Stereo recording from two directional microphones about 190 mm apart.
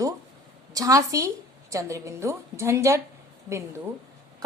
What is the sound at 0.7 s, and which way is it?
A woman's voice, 20° right (ahead or behind).